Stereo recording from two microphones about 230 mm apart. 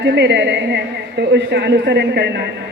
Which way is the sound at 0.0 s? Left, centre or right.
Right.